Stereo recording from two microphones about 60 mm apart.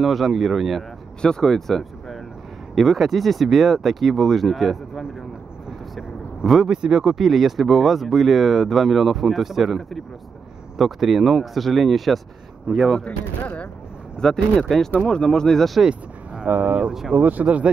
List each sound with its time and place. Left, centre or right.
0.0 s speech: centre
1.2 s speech: centre
5.7 s vehicle: centre
6.7 s speech: centre
13.0 s speech: left
14.2 s speech: centre
15.8 s a sound: centre
16.4 s speech: right